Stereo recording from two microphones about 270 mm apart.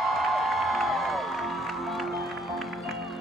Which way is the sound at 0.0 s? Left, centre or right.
Centre.